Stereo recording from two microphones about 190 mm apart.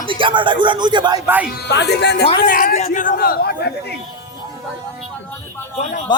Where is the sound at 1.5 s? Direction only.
60° left (ahead or behind).